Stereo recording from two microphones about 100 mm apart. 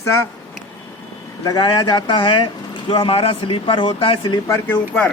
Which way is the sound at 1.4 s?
40° left (ahead or behind).